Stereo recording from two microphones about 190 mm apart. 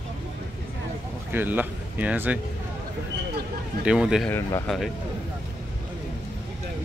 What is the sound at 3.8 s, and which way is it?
Speech, 5° right (ahead or behind).